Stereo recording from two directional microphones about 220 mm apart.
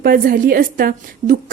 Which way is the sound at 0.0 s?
40° right (ahead or behind).